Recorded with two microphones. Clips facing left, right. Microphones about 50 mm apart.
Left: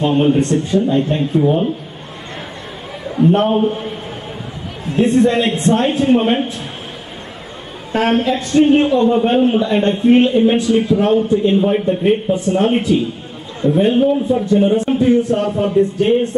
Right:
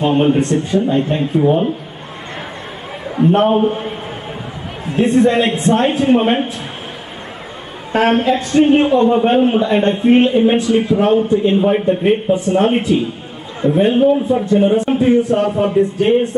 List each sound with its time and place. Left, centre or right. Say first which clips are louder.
0.0 s speech: even; right
3.2 s a man's voice: right 1 dB; right
5.1 s a man's voice: right 2 dB; centre
7.9 s a man's voice: right 2 dB; centre